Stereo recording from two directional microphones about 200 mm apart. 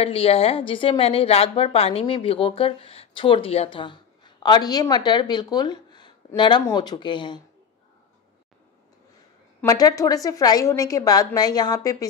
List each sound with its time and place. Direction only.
0.0 s a woman's voice: 30° left (ahead or behind)
9.6 s a woman's voice: 15° left (ahead or behind)